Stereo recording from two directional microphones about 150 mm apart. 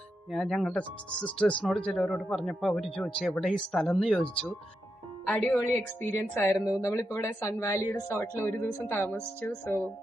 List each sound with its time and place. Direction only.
0.3 s speech: centre (ahead or behind)